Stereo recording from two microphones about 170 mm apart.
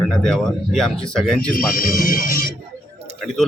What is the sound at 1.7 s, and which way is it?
Speech, 55° left (ahead or behind).